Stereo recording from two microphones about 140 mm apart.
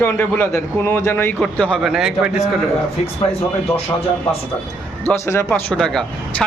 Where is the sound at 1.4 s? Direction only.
5° left (ahead or behind).